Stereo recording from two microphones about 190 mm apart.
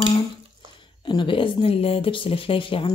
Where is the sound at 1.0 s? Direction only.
25° left (ahead or behind).